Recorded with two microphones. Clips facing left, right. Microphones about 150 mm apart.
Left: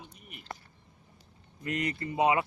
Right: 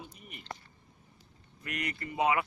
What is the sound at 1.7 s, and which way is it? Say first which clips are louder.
Speech: left 5 dB; 25° left (ahead or behind).